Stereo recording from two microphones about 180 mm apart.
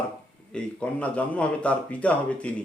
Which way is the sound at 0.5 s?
5° left (ahead or behind).